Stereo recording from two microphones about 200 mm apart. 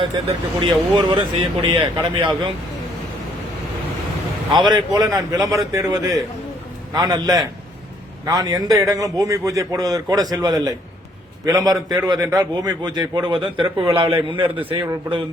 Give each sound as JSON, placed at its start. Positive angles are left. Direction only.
{"t": 0.0, "sound": "a man's voice", "side_deg": -25}
{"t": 4.5, "sound": "a man's voice", "side_deg": -20}